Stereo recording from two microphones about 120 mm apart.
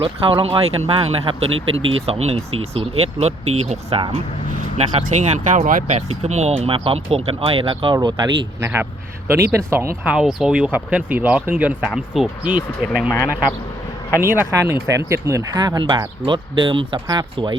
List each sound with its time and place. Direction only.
0.0 s speech: 50° right (ahead or behind); by 6.5 s 70° right (ahead or behind)
6.7 s speech: 50° right (ahead or behind)
8.6 s speech: 20° right (ahead or behind)
10.1 s speech: 5° right (ahead or behind)
11.8 s speech: centre (ahead or behind)
14.2 s speech: 20° right (ahead or behind); by 17.6 s 40° right (ahead or behind)